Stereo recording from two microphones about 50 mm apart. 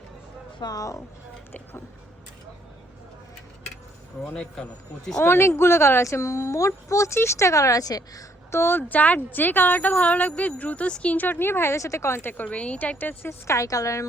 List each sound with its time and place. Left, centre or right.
5.2 s speech: left
8.5 s speech: left
8.9 s a woman's voice: left
11.7 s speech: left
12.3 s speech: left
13.0 s a woman's voice: left
13.5 s a woman's voice: left